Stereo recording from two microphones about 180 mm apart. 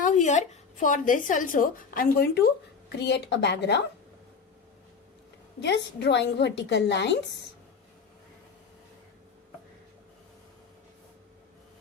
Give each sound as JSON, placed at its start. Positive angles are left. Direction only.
{"t": 0.0, "sound": "a woman's voice", "side_deg": 40}
{"t": 5.5, "sound": "a woman's voice", "side_deg": 75}